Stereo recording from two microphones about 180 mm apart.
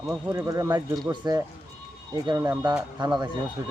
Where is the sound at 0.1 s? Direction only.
15° right (ahead or behind).